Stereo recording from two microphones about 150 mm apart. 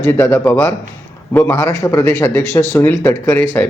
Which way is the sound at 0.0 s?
15° left (ahead or behind).